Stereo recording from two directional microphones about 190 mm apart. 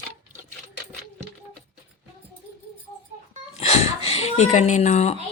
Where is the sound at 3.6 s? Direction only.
35° left (ahead or behind).